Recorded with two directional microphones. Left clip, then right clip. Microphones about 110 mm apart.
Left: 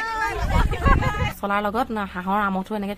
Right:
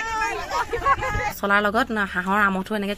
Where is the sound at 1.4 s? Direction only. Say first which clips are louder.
Right 4 dB; 15° right (ahead or behind).